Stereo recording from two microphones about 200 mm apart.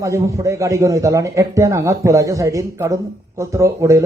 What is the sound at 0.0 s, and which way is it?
A man's voice, 15° right (ahead or behind).